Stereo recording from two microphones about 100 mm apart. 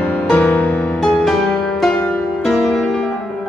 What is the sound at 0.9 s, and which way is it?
Music, 5° left (ahead or behind).